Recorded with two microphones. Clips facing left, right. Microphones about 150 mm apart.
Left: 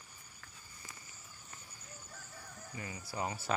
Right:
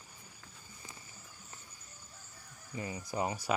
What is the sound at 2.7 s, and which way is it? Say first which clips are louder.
Speech: right 6 dB; 25° right (ahead or behind).